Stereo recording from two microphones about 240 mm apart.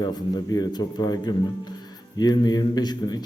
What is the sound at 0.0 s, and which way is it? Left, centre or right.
A man's voice, centre.